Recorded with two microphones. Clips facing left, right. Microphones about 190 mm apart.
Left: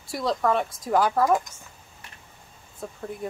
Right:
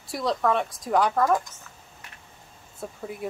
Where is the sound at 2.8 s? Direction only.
5° right (ahead or behind).